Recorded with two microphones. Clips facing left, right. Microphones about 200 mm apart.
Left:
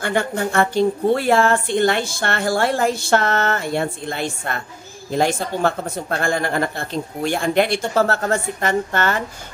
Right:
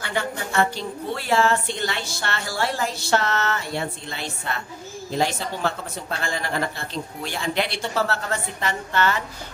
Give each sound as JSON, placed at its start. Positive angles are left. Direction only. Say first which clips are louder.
{"t": 0.0, "sound": "a woman's voice", "louder": "left 7 dB", "side_deg": 50}